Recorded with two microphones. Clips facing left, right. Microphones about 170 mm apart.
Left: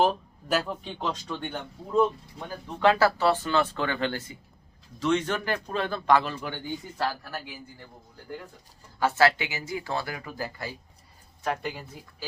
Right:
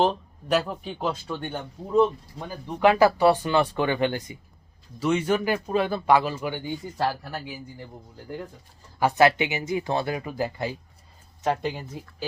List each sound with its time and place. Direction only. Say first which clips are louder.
0.0 s speech: right 1 dB; 5° left (ahead or behind)
2.5 s speech: right 2 dB; 15° right (ahead or behind)